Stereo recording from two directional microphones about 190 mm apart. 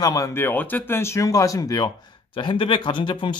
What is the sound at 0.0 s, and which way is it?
Speech, 20° left (ahead or behind).